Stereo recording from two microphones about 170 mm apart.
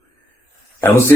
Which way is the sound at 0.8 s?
10° left (ahead or behind).